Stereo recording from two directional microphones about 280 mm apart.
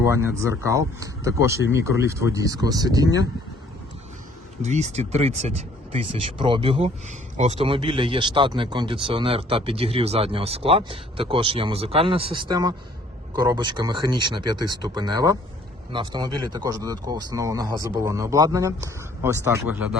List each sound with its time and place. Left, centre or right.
0.0 s speech: centre
4.6 s speech: right; by 20.0 s centre